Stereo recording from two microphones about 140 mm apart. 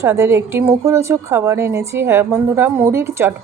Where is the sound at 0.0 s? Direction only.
20° right (ahead or behind).